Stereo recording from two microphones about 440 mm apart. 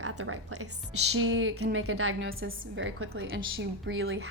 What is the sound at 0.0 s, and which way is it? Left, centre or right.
A woman's voice, right.